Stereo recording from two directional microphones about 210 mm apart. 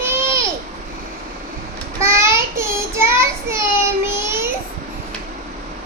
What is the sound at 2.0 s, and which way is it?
Child singing, 15° right (ahead or behind).